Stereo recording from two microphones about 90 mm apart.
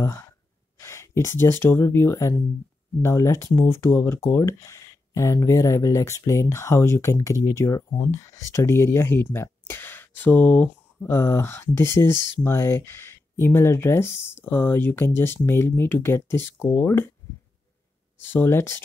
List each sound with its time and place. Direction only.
0.7 s speech: 35° left (ahead or behind)
18.3 s speech: 25° left (ahead or behind)